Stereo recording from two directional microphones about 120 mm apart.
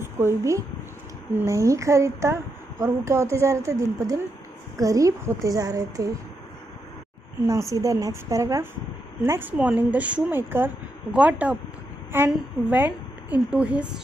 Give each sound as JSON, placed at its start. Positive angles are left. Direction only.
{"t": 0.0, "sound": "a woman's voice", "side_deg": -20}
{"t": 7.4, "sound": "a woman's voice", "side_deg": -25}